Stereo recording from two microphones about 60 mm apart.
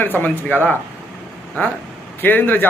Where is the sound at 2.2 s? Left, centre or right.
Left.